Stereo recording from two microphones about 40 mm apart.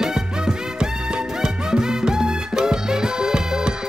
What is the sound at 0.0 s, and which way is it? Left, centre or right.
Music, centre.